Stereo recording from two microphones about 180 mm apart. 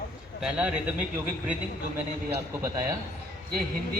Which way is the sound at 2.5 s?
20° right (ahead or behind).